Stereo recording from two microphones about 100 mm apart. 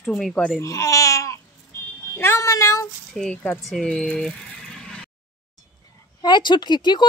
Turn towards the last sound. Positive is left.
turn(degrees=50)  # may be behind; listen again after turning